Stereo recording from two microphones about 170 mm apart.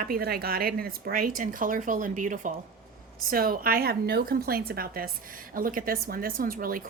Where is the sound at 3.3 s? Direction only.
60° right (ahead or behind).